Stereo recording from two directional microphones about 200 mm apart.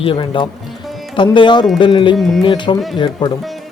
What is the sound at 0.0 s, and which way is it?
Music, 25° left (ahead or behind).